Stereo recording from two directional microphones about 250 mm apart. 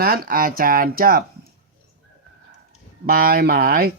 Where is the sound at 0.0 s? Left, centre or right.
Right.